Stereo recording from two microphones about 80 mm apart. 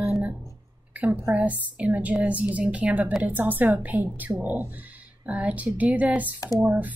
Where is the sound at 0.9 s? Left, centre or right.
Centre.